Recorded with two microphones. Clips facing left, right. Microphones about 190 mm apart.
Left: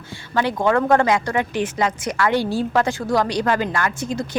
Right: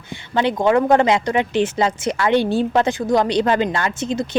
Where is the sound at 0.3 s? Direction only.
20° right (ahead or behind).